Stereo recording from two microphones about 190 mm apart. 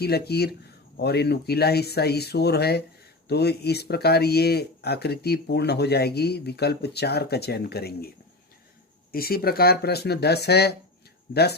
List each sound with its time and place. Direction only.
0.0 s speech: 55° left (ahead or behind)
9.1 s speech: 55° left (ahead or behind)